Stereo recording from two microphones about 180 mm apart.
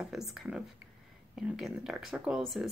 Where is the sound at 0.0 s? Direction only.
Centre (ahead or behind).